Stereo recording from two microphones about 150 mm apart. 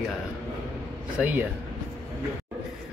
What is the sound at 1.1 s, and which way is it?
Speech, 10° right (ahead or behind).